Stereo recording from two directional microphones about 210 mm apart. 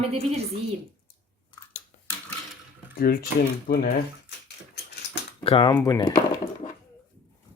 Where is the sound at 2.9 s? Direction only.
45° left (ahead or behind).